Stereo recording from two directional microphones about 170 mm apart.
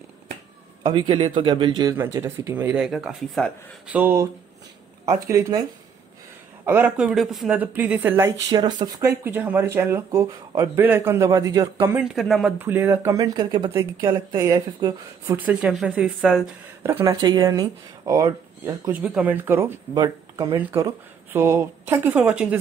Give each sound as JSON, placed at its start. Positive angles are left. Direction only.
{"t": 0.8, "sound": "speech", "side_deg": -25}
{"t": 2.7, "sound": "speech", "side_deg": -5}
{"t": 3.9, "sound": "speech", "side_deg": -15}
{"t": 6.6, "sound": "speech", "side_deg": -10}
{"t": 11.9, "sound": "speech", "side_deg": 0}
{"t": 12.5, "sound": "speech", "side_deg": -10}
{"t": 15.3, "sound": "speech", "side_deg": -5}
{"t": 16.8, "sound": "speech", "side_deg": -15}